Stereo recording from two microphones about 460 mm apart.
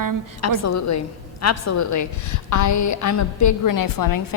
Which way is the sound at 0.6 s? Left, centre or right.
Left.